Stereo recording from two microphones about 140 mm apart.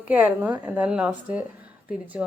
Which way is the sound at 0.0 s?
10° right (ahead or behind).